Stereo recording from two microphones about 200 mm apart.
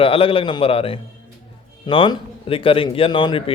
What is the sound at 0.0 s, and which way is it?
A man's voice, 25° left (ahead or behind).